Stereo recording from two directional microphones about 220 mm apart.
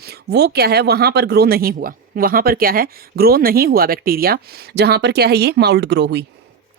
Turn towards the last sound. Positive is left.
turn(degrees=-50)  # may be behind; listen again after turning